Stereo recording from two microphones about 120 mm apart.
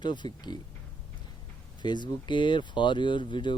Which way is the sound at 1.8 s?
40° left (ahead or behind).